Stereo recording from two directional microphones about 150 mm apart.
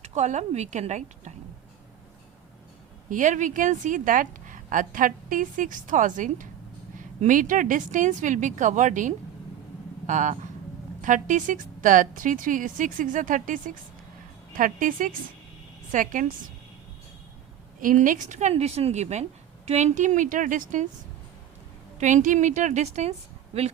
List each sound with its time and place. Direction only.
0.0 s a woman's voice: 50° right (ahead or behind)
3.1 s a woman's voice: 60° right (ahead or behind)
17.7 s a woman's voice: 60° right (ahead or behind)
21.9 s a woman's voice: 55° right (ahead or behind)